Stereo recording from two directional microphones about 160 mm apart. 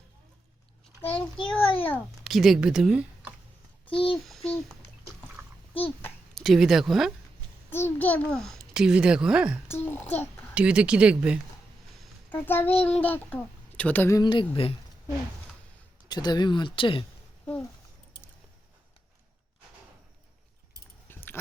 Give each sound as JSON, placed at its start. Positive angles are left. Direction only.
{"t": 1.1, "sound": "a child's voice", "side_deg": 5}
{"t": 2.2, "sound": "speech", "side_deg": 0}
{"t": 3.8, "sound": "a sound", "side_deg": 35}
{"t": 4.4, "sound": "a child's voice", "side_deg": 5}
{"t": 6.3, "sound": "speech", "side_deg": 0}
{"t": 7.7, "sound": "a child's voice", "side_deg": 15}
{"t": 9.8, "sound": "a child's voice", "side_deg": 15}
{"t": 10.5, "sound": "speech", "side_deg": -5}
{"t": 12.3, "sound": "a child's voice", "side_deg": 10}
{"t": 14.2, "sound": "speech", "side_deg": 30}
{"t": 14.5, "sound": "a sound", "side_deg": 35}
{"t": 16.0, "sound": "speech", "side_deg": 25}
{"t": 17.4, "sound": "a sound", "side_deg": 10}
{"t": 21.1, "sound": "a sound", "side_deg": 10}